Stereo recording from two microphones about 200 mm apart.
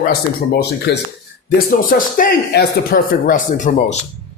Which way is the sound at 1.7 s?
45° left (ahead or behind).